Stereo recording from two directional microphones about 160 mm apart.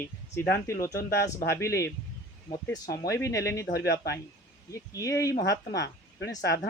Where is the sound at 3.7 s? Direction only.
90° left.